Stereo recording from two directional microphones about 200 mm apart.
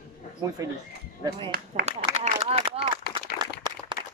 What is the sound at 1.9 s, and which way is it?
Speech, 30° right (ahead or behind).